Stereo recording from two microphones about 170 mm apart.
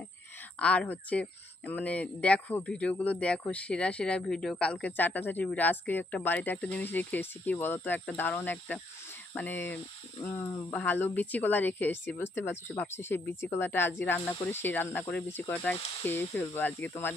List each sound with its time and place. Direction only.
0.6 s speech: 5° left (ahead or behind)